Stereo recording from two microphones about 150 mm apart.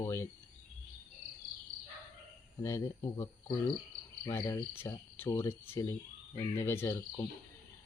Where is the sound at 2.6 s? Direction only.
20° left (ahead or behind).